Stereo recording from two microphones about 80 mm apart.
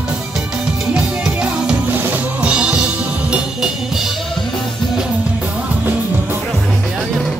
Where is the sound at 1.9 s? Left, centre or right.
Right.